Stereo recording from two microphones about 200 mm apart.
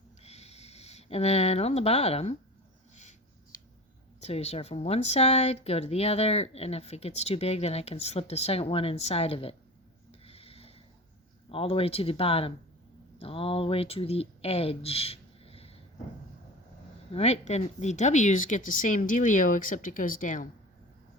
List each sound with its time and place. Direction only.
0.2 s a sound: 30° left (ahead or behind)
2.9 s writing: 35° left (ahead or behind)
4.2 s speech: 30° left (ahead or behind)
10.1 s a sound: 30° left (ahead or behind)
11.4 s speech: 30° left (ahead or behind)
17.1 s speech: 30° left (ahead or behind)